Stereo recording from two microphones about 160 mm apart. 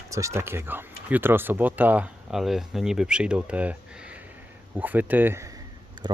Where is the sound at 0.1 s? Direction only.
20° right (ahead or behind).